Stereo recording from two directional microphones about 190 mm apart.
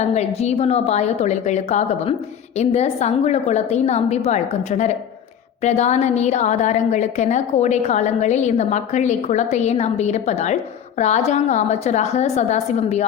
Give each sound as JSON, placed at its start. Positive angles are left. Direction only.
{"t": 0.1, "sound": "a woman's voice", "side_deg": 35}